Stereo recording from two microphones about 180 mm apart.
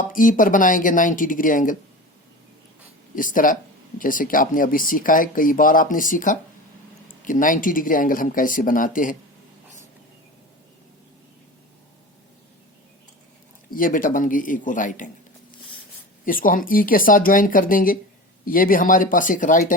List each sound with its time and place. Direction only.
0.1 s speech: 50° left (ahead or behind)
3.2 s speech: 50° left (ahead or behind)
13.7 s speech: 50° left (ahead or behind)
16.2 s speech: 50° left (ahead or behind)